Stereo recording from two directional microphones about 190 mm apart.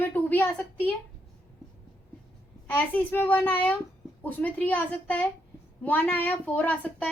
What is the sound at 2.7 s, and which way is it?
A woman's voice, 10° left (ahead or behind).